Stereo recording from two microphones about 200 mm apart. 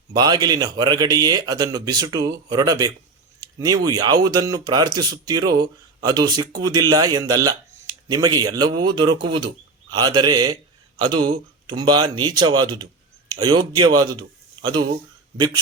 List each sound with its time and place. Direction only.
0.1 s speech: 20° right (ahead or behind)
3.4 s a sound: 20° right (ahead or behind)
3.8 s a man's voice: 20° right (ahead or behind)